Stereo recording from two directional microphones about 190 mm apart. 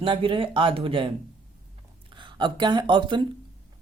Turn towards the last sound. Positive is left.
turn(degrees=-25)  # may be behind; listen again after turning